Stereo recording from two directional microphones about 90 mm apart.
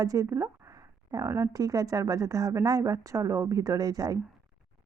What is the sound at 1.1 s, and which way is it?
Speech, 40° right (ahead or behind).